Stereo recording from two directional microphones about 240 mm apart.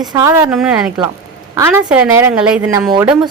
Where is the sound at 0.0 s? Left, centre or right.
Centre.